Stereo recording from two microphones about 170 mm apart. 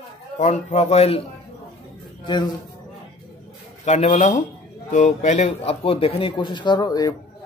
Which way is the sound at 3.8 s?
45° left (ahead or behind).